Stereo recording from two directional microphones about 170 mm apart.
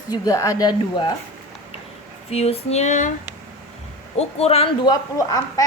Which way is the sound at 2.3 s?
35° left (ahead or behind).